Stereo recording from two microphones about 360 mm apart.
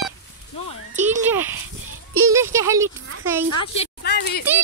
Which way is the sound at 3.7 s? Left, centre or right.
Left.